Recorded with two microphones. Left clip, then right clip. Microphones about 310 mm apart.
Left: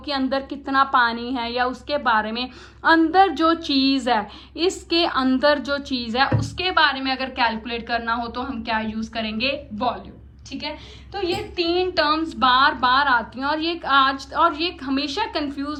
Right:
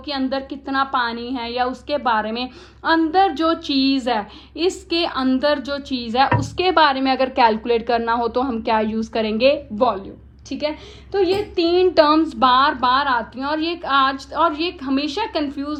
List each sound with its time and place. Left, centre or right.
0.0 s a woman's voice: centre